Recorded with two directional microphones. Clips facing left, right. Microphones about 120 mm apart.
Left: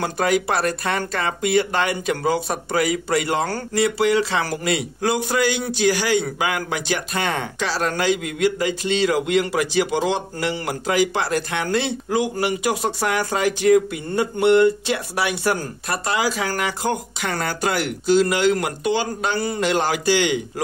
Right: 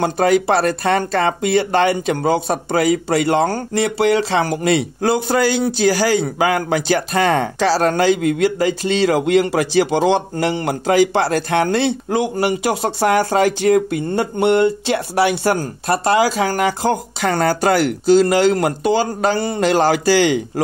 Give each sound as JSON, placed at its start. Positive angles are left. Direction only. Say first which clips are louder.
{"t": 0.0, "sound": "a man's voice", "louder": "right 5 dB", "side_deg": -30}